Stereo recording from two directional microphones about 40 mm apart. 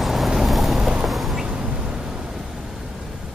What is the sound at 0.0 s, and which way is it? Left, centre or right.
Vehicle, centre.